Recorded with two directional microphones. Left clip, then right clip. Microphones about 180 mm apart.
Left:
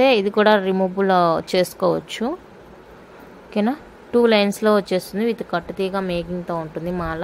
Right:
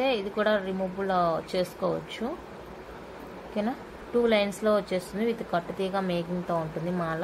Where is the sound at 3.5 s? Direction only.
60° left (ahead or behind); by 7.0 s 40° left (ahead or behind).